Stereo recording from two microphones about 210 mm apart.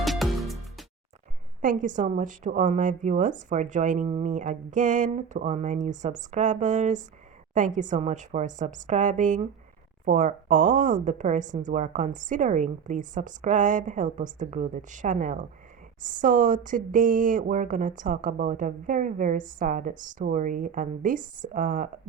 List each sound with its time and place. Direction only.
0.0 s music: centre (ahead or behind)
1.6 s speech: 40° right (ahead or behind)